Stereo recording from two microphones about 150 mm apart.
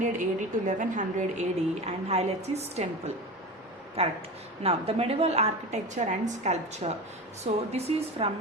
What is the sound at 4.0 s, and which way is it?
A woman's voice, 40° right (ahead or behind).